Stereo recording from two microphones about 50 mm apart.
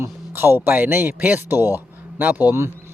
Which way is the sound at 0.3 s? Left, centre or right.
Right.